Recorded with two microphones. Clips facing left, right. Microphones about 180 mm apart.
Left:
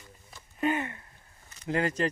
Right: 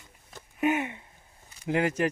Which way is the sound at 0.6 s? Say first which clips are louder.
Right 2 dB; 10° right (ahead or behind).